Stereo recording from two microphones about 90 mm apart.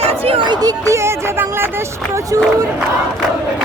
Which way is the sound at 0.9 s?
25° right (ahead or behind).